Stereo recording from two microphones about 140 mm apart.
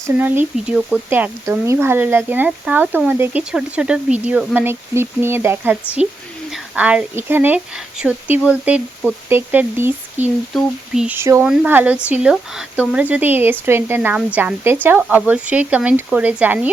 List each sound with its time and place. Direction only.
0.1 s speech: 15° right (ahead or behind)
6.0 s speech: 5° right (ahead or behind)
10.5 s speech: centre (ahead or behind)
11.2 s speech: 20° right (ahead or behind)